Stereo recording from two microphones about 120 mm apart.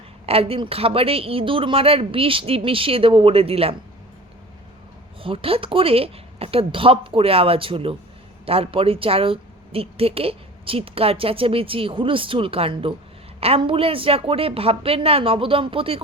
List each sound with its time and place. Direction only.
0.3 s a woman's voice: 55° right (ahead or behind)
5.2 s a woman's voice: 50° right (ahead or behind)